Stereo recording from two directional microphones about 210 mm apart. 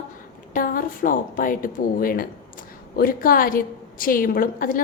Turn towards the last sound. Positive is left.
turn(degrees=40)  # may be behind; listen again after turning